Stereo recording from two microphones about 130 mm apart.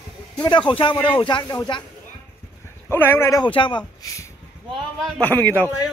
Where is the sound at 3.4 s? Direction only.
40° left (ahead or behind).